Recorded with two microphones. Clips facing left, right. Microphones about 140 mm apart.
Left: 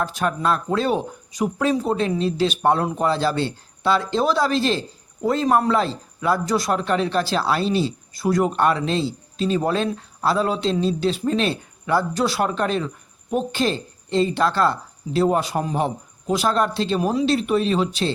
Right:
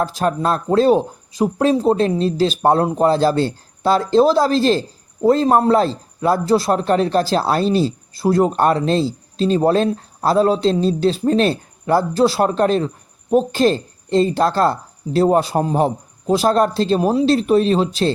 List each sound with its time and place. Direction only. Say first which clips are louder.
0.2 s speech: right 1 dB; 35° right (ahead or behind)